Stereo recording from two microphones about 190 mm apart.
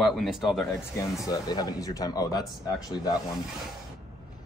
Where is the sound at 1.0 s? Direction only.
20° left (ahead or behind).